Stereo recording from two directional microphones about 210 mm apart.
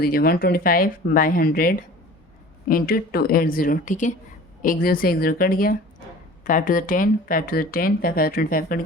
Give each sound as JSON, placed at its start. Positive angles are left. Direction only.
{"t": 0.0, "sound": "speech", "side_deg": 45}